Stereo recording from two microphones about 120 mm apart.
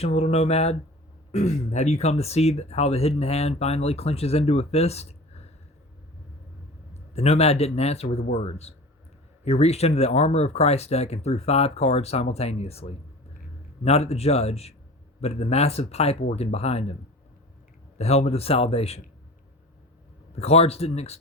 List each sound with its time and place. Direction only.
0.0 s speech: 60° left (ahead or behind)
6.9 s speech: 65° left (ahead or behind)
17.9 s speech: 60° left (ahead or behind)
20.3 s speech: 60° left (ahead or behind)